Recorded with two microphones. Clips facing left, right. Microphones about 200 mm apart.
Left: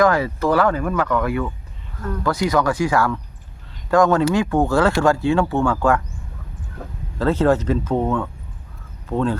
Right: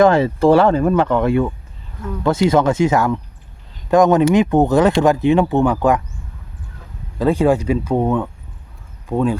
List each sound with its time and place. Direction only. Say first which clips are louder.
0.0 s speech: right 5 dB; 25° right (ahead or behind)
6.8 s a sound: left 7 dB; 55° left (ahead or behind)
7.2 s speech: right 2 dB; 15° right (ahead or behind)